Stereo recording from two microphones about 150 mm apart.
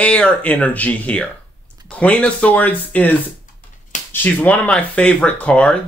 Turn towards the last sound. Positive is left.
turn(degrees=5)  # may be behind; listen again after turning